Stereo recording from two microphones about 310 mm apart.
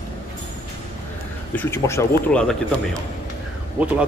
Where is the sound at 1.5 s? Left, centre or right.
Centre.